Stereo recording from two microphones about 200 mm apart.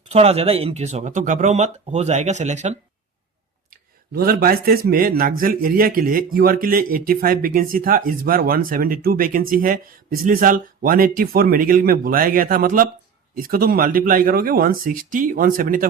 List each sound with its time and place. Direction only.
0.1 s speech: 30° right (ahead or behind)
3.7 s speech: 50° right (ahead or behind)